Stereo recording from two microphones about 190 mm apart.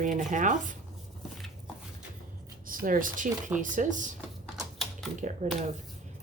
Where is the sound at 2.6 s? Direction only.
45° right (ahead or behind).